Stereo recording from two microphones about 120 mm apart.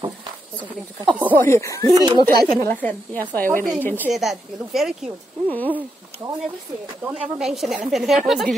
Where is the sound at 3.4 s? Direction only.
15° left (ahead or behind).